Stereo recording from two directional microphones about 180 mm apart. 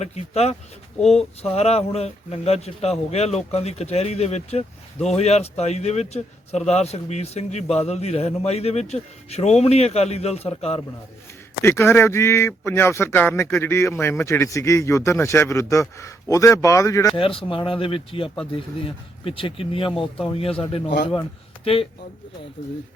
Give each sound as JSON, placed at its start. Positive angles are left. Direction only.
{"t": 0.0, "sound": "speech", "side_deg": 35}
{"t": 11.6, "sound": "speech", "side_deg": 15}
{"t": 17.2, "sound": "speech", "side_deg": 30}